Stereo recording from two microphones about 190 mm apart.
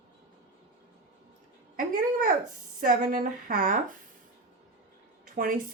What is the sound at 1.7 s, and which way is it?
Speech, 45° right (ahead or behind).